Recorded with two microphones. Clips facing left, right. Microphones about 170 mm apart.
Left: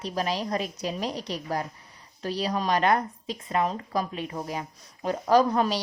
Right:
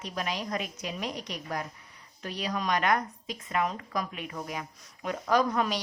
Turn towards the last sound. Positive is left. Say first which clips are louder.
# left 5 dB
turn(degrees=30)  # may be behind; listen again after turning